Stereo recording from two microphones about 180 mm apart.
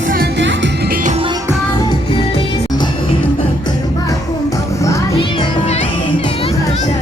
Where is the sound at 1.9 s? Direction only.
25° left (ahead or behind).